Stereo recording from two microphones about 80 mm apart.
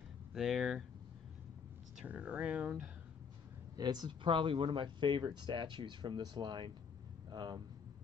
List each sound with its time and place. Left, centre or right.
0.3 s speech: centre
2.0 s speech: centre
3.7 s speech: right